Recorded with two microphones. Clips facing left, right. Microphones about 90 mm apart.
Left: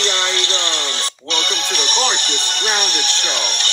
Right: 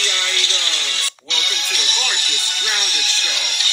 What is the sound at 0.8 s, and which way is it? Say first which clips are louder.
Music: left 4 dB; 25° left (ahead or behind).